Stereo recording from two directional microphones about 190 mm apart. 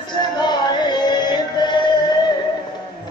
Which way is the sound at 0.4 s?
25° left (ahead or behind).